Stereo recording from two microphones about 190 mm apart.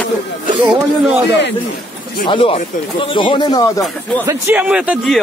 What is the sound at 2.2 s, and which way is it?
Speech, 30° left (ahead or behind).